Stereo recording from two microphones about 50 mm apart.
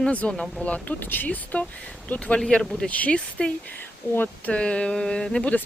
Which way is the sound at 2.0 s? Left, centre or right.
Left.